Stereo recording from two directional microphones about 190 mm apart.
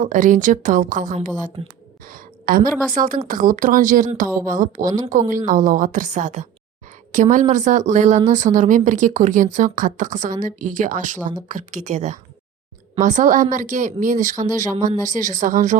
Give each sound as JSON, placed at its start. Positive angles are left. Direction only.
{"t": 0.0, "sound": "a woman's voice", "side_deg": -45}